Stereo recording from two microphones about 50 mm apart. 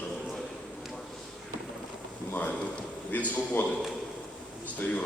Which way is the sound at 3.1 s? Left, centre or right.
Left.